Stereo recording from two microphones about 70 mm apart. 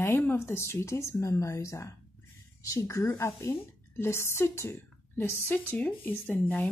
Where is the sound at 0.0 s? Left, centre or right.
Left.